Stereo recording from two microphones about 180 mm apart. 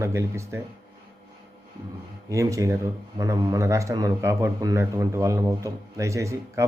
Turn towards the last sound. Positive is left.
turn(degrees=-15)  # may be behind; listen again after turning